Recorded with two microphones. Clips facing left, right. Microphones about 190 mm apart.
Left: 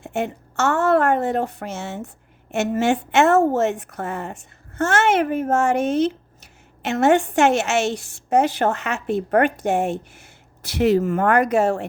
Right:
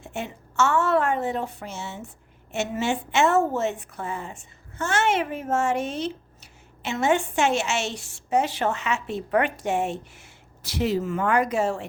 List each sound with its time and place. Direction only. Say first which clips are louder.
0.0 s a woman's voice: left 8 dB; 60° left (ahead or behind)